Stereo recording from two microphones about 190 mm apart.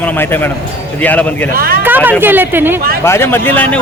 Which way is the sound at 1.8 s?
10° right (ahead or behind).